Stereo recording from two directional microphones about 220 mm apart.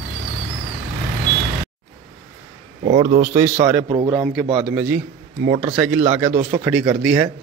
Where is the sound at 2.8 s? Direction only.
20° right (ahead or behind).